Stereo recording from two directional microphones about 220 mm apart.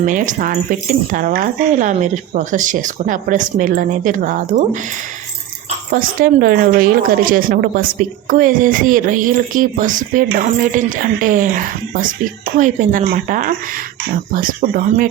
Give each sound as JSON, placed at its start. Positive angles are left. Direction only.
{"t": 0.0, "sound": "speech", "side_deg": -35}
{"t": 5.9, "sound": "speech", "side_deg": -40}